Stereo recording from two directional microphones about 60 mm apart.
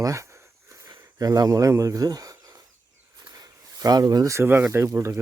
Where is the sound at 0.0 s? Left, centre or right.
Right.